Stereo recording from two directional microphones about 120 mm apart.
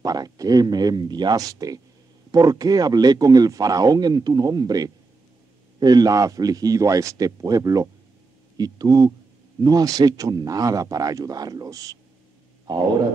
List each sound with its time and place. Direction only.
0.0 s a man's voice: 30° right (ahead or behind)